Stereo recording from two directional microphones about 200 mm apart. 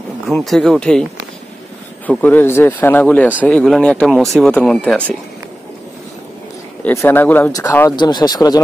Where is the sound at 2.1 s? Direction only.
10° left (ahead or behind).